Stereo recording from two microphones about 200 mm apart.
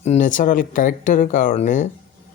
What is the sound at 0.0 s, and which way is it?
Speech, 35° left (ahead or behind).